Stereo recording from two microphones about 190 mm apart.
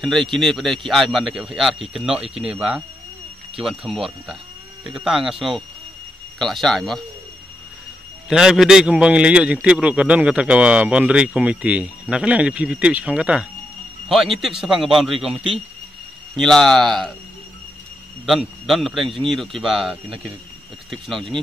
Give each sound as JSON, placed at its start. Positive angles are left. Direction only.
{"t": 0.0, "sound": "a man's voice", "side_deg": 0}
{"t": 8.3, "sound": "a man's voice", "side_deg": -5}
{"t": 18.2, "sound": "a man's voice", "side_deg": 0}